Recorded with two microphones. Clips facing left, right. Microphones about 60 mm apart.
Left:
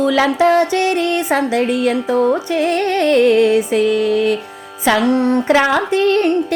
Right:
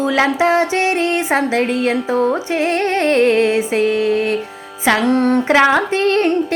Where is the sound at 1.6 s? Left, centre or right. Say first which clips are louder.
Left 1 dB; right.